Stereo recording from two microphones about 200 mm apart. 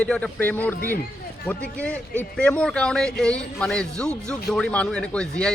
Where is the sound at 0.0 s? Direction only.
5° left (ahead or behind).